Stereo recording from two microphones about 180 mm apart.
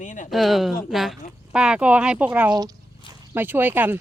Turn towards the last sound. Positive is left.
turn(degrees=-10)  # may be behind; listen again after turning